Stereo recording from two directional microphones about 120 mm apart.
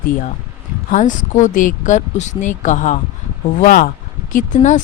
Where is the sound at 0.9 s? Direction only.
90° left.